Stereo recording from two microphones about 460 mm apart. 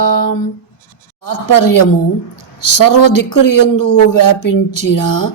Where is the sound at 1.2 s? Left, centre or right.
Left.